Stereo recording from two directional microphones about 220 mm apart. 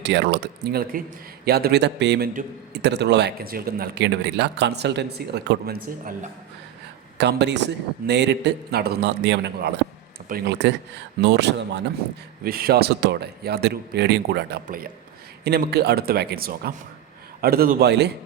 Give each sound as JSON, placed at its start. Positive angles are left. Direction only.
{"t": 0.0, "sound": "a man's voice", "side_deg": -50}
{"t": 7.2, "sound": "a man's voice", "side_deg": -50}